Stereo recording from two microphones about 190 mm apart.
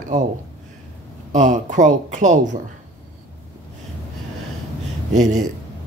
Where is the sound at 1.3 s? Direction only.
40° right (ahead or behind).